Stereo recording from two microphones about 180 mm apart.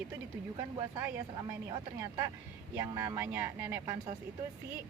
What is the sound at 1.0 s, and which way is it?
Speech, 15° right (ahead or behind).